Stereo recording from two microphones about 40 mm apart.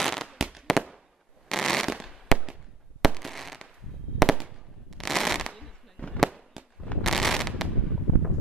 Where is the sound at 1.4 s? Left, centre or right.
Centre.